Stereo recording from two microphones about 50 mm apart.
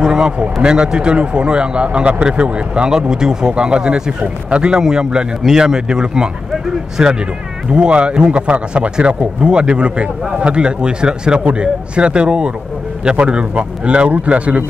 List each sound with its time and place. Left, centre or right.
0.0 s a man's voice: centre